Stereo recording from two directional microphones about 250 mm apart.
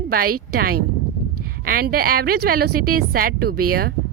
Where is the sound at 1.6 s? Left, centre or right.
Right.